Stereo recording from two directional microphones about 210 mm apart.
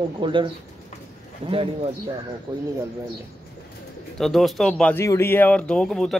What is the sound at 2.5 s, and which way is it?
Speech, 20° right (ahead or behind).